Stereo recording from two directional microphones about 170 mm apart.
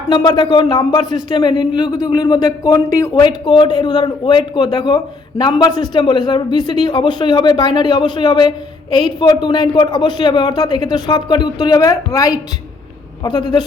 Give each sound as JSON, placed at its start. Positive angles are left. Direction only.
{"t": 0.1, "sound": "speech", "side_deg": 25}